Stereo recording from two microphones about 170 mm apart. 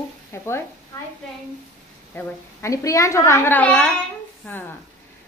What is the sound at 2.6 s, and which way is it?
Speech, 20° left (ahead or behind).